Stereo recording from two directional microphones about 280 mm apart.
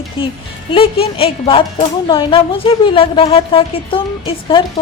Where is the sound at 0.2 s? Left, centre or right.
Centre.